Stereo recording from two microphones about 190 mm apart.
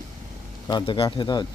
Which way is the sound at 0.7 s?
25° left (ahead or behind).